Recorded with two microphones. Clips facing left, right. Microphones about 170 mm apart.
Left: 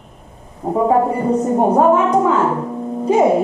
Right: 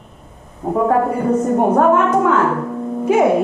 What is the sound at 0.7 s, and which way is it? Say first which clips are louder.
A woman's voice: left 1 dB; 15° left (ahead or behind).